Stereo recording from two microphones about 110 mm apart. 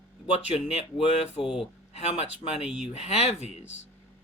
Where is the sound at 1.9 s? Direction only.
80° left.